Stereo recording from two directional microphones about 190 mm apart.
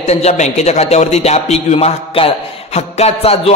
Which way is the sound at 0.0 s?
35° left (ahead or behind).